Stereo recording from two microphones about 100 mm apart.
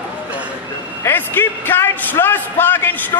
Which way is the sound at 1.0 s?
20° left (ahead or behind).